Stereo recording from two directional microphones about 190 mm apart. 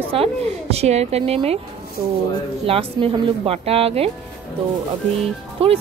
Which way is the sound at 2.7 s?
30° right (ahead or behind).